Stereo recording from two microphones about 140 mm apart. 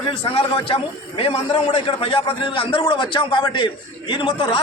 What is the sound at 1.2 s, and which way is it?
A man's voice, 45° left (ahead or behind).